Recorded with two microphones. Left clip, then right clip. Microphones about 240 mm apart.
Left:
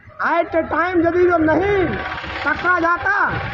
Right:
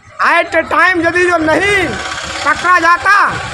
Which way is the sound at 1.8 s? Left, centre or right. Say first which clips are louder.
Right 5 dB; right.